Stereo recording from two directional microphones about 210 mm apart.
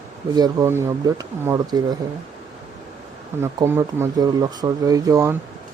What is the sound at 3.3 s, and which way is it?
Speech, 10° right (ahead or behind).